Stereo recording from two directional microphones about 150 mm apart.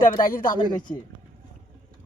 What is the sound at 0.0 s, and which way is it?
Speech, 70° left (ahead or behind).